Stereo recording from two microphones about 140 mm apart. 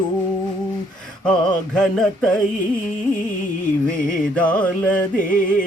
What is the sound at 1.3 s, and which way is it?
Music, 5° left (ahead or behind).